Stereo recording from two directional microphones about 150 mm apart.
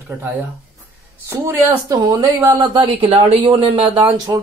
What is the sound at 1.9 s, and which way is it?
Speech, 25° right (ahead or behind).